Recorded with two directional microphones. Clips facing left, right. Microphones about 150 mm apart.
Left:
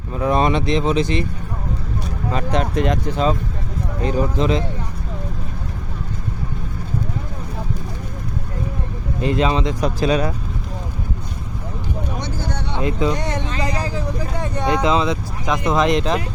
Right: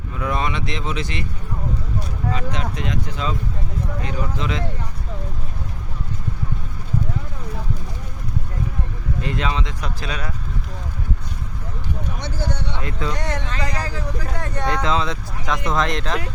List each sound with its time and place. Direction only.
0.1 s speech: 30° left (ahead or behind)
2.3 s speech: 55° left (ahead or behind)
4.0 s speech: 35° left (ahead or behind)
9.2 s speech: 35° left (ahead or behind)
12.8 s speech: 20° left (ahead or behind)